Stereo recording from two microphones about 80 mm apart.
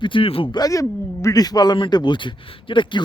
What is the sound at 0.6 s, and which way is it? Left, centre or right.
Speech, left.